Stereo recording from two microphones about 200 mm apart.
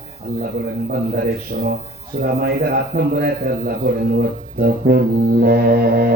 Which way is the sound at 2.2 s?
50° right (ahead or behind).